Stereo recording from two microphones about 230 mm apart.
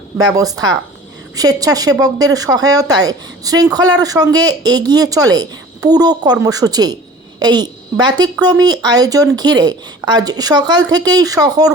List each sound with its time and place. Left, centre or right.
0.2 s a woman's voice: centre